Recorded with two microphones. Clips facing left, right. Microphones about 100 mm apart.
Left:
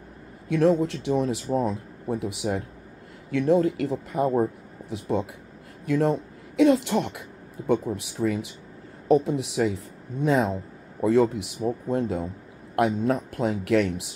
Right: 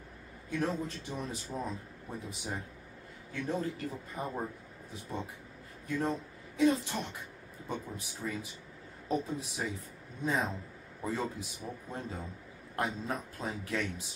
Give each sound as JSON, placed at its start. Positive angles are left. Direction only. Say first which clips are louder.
{"t": 0.5, "sound": "speech", "louder": "left 13 dB", "side_deg": 75}
{"t": 5.9, "sound": "a man's voice", "louder": "left 10 dB", "side_deg": 80}